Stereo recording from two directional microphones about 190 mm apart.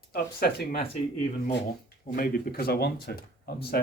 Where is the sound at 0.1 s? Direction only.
55° left (ahead or behind).